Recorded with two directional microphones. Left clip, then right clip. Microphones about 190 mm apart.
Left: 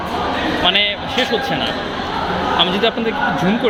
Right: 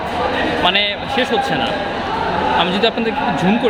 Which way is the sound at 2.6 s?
20° right (ahead or behind).